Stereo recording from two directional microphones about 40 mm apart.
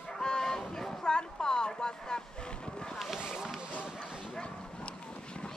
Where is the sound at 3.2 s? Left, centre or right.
Centre.